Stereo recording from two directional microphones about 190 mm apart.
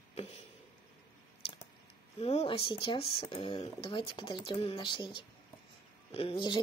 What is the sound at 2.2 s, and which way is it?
Speech, 35° left (ahead or behind).